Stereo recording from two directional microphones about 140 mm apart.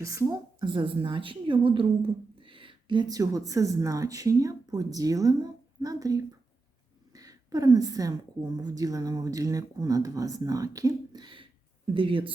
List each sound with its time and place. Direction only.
0.0 s a woman's voice: 20° right (ahead or behind)
0.6 s a woman's voice: 35° right (ahead or behind)